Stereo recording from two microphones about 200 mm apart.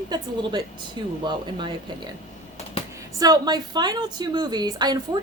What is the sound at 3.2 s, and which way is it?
A woman's voice, 20° right (ahead or behind).